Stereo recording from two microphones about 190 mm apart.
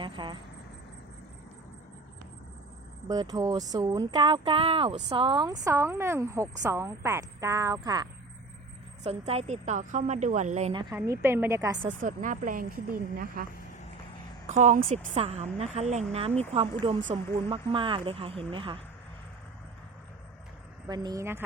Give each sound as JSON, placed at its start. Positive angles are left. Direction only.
{"t": 0.0, "sound": "speech", "side_deg": -25}
{"t": 3.1, "sound": "speech", "side_deg": -20}
{"t": 9.0, "sound": "a woman's voice", "side_deg": -35}
{"t": 10.7, "sound": "speech", "side_deg": -25}
{"t": 10.9, "sound": "speech", "side_deg": -15}
{"t": 11.9, "sound": "speech", "side_deg": -45}
{"t": 14.4, "sound": "a woman's voice", "side_deg": -40}
{"t": 20.8, "sound": "speech", "side_deg": -20}